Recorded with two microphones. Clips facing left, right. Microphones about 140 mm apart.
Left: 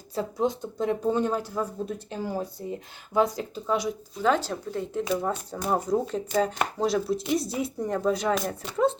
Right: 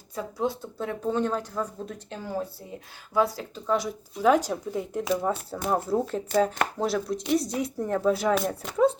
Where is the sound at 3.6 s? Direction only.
Centre (ahead or behind).